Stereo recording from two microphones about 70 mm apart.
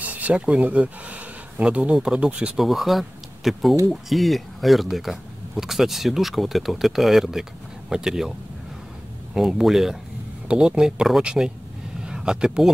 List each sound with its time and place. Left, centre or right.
0.0 s speech: right; by 8.3 s centre
9.3 s speech: centre